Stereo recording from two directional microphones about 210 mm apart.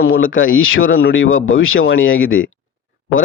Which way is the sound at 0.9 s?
50° left (ahead or behind).